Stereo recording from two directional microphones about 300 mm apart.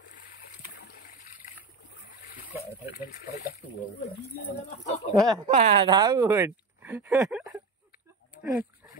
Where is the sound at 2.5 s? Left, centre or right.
Centre.